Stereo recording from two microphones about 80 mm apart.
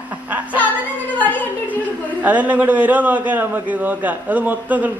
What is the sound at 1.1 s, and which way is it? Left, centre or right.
Speech, left.